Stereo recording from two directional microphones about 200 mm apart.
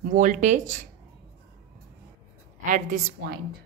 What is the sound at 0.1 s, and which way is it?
Speech, 40° right (ahead or behind).